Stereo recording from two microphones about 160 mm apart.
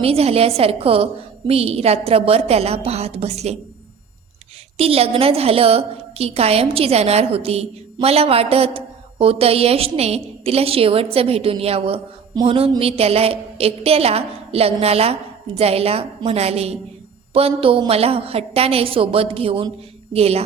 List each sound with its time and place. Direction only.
0.0 s a woman's voice: 40° right (ahead or behind)
4.8 s a woman's voice: 35° right (ahead or behind)